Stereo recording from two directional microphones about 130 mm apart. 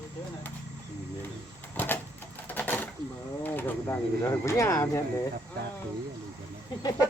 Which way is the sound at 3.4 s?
15° left (ahead or behind).